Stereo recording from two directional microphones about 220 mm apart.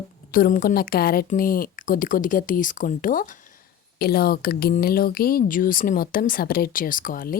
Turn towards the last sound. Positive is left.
turn(degrees=40)  # may be behind; listen again after turning